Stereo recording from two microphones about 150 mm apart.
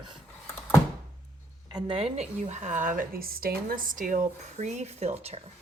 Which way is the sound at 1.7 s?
35° right (ahead or behind).